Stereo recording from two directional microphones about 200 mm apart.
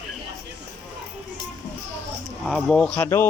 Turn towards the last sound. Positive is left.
turn(degrees=10)  # may be behind; listen again after turning